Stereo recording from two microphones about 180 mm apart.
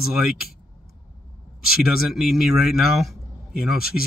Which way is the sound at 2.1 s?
Centre (ahead or behind).